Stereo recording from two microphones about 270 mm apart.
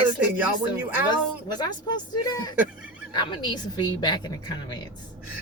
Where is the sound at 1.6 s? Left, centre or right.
Centre.